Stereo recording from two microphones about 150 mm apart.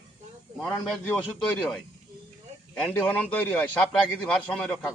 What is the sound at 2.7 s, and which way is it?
A man's voice, 10° left (ahead or behind).